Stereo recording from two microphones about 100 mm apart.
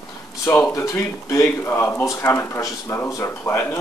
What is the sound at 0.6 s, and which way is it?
Speech, 35° left (ahead or behind).